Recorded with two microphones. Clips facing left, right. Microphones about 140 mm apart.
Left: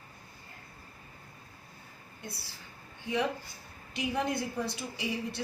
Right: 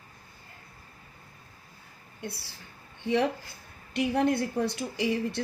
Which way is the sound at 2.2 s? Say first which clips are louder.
Right 6 dB; 60° right (ahead or behind).